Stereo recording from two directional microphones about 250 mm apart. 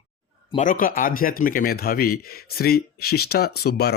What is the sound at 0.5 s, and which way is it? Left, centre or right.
Speech, left.